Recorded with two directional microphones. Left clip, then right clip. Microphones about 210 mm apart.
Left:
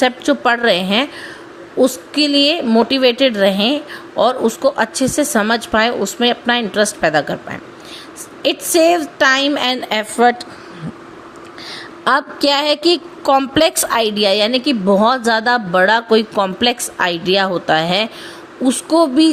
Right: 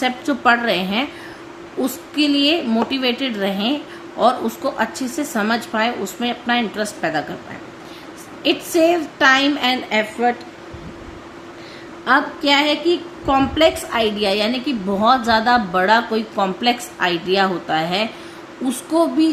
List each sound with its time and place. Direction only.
0.0 s a woman's voice: 40° left (ahead or behind)
8.4 s a woman's voice: 45° left (ahead or behind)
12.0 s a woman's voice: 55° left (ahead or behind)